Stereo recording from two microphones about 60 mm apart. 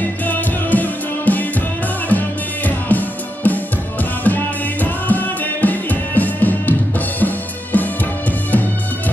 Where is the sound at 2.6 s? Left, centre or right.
Left.